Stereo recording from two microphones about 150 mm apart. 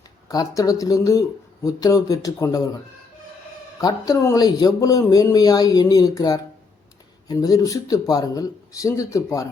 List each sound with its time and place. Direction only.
0.3 s a man's voice: 25° left (ahead or behind)